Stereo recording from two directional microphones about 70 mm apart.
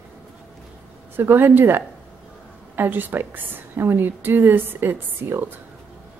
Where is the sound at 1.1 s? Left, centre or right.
Right.